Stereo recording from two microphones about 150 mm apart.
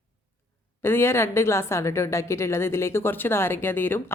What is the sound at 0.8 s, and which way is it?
A woman's voice, 15° left (ahead or behind).